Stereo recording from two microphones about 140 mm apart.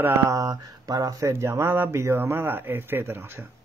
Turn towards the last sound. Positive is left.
turn(degrees=-15)  # may be behind; listen again after turning